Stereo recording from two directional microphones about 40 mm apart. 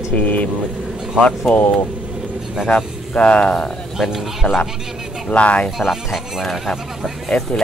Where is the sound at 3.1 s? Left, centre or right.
Left.